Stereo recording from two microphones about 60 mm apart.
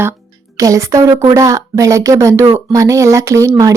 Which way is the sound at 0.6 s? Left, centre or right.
Right.